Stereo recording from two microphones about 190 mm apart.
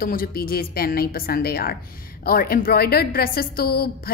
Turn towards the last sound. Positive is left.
turn(degrees=55)  # may be behind; listen again after turning